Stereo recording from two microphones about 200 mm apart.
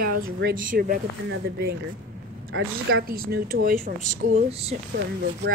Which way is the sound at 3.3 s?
45° right (ahead or behind).